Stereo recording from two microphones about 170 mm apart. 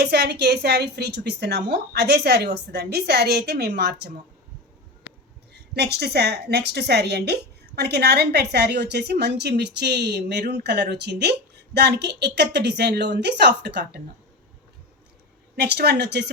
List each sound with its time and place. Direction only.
0.0 s a woman's voice: 70° right (ahead or behind)
5.7 s a woman's voice: 70° right (ahead or behind)
15.5 s speech: 80° right